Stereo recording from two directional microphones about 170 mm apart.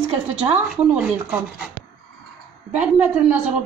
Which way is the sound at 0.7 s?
5° right (ahead or behind).